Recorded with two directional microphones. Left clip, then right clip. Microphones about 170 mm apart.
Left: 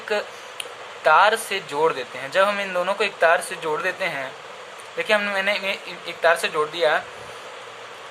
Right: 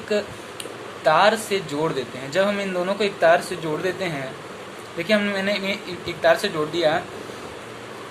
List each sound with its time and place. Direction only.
0.1 s speech: 30° left (ahead or behind)